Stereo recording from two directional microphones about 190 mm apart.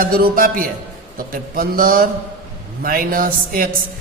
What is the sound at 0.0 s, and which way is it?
A woman's voice, 50° right (ahead or behind).